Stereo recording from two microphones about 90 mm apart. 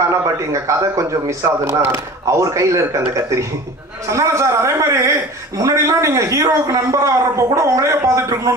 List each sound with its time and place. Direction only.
0.1 s speech: 35° right (ahead or behind)